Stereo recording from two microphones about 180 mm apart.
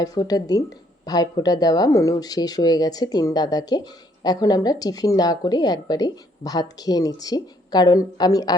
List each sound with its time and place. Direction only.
0.0 s speech: 20° left (ahead or behind)